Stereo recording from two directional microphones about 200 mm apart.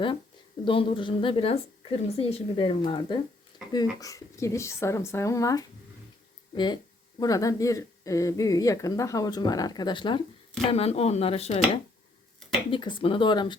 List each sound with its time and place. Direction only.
0.6 s a woman's voice: 25° left (ahead or behind)
7.2 s a woman's voice: 15° left (ahead or behind)